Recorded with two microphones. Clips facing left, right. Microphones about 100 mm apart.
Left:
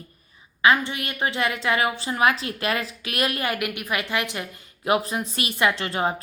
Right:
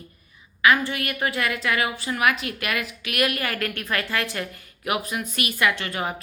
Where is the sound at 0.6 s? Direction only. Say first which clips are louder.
Even; 25° left (ahead or behind).